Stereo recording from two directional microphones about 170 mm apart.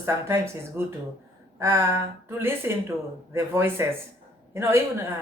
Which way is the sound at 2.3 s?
15° right (ahead or behind).